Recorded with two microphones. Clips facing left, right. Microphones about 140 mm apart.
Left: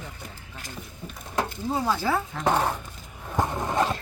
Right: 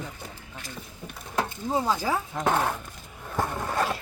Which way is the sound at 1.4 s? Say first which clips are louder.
Right 1 dB; 15° right (ahead or behind).